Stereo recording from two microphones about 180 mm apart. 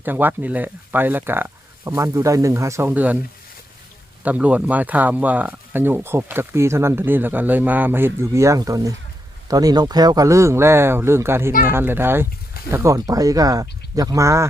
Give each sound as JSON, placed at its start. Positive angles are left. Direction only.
{"t": 0.0, "sound": "speech", "side_deg": -10}
{"t": 4.2, "sound": "speech", "side_deg": -10}